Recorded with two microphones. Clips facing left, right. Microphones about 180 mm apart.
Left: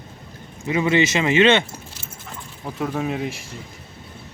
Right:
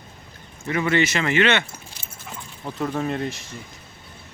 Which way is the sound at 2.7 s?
5° left (ahead or behind).